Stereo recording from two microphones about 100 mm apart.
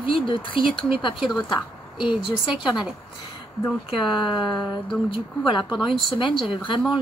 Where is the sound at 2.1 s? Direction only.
5° right (ahead or behind).